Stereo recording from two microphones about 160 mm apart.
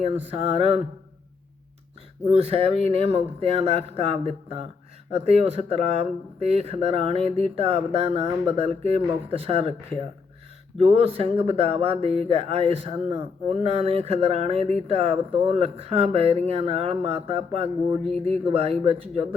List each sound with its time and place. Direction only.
0.3 s speech: 40° right (ahead or behind)
2.2 s speech: 40° right (ahead or behind)
10.8 s speech: 35° right (ahead or behind)